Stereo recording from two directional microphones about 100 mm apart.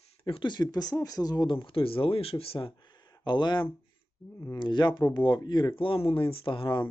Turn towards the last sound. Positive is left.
turn(degrees=60)  # may be behind; listen again after turning